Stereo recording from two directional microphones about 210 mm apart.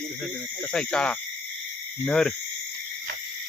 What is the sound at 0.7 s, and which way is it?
Cricket, 5° left (ahead or behind).